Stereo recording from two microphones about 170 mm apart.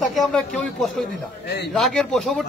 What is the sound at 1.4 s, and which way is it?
Speech, 75° left (ahead or behind).